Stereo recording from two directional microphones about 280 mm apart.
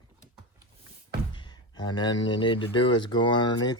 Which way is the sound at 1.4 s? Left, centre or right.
Centre.